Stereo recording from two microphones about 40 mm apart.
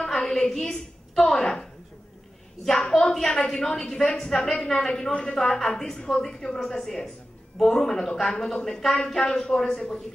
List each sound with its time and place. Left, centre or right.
0.0 s a woman's voice: centre
2.7 s a woman's voice: centre
5.1 s a woman's voice: left